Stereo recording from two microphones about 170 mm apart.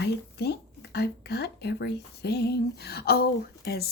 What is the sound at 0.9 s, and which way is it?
Speech, 75° left (ahead or behind).